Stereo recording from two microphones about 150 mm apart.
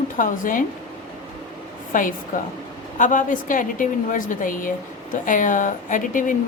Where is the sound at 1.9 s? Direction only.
60° left (ahead or behind).